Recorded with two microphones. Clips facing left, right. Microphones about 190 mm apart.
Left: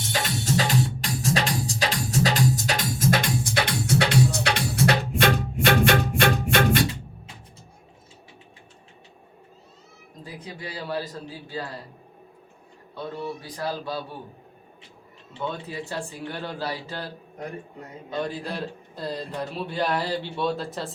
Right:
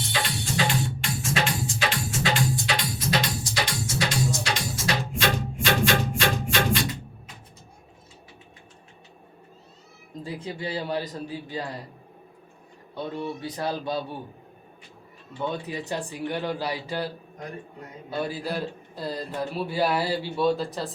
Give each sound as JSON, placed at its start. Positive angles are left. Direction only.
{"t": 0.0, "sound": "music", "side_deg": 45}
{"t": 10.2, "sound": "a man's voice", "side_deg": -30}
{"t": 13.4, "sound": "speech", "side_deg": -25}
{"t": 15.6, "sound": "speech", "side_deg": -20}
{"t": 18.1, "sound": "a man's voice", "side_deg": -5}